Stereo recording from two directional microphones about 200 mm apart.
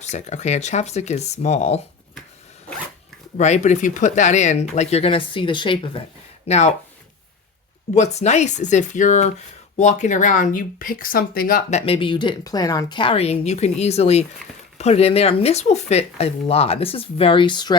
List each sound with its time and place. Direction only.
0.0 s speech: 35° left (ahead or behind)
3.3 s speech: 35° left (ahead or behind)
7.9 s speech: 35° left (ahead or behind)
11.9 s speech: 25° left (ahead or behind)